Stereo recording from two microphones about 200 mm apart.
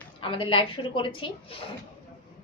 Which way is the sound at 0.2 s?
25° left (ahead or behind).